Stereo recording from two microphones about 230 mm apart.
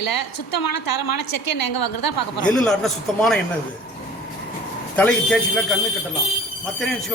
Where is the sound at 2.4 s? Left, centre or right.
Centre.